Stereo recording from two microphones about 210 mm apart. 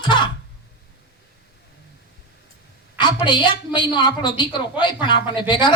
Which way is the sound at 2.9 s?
20° left (ahead or behind).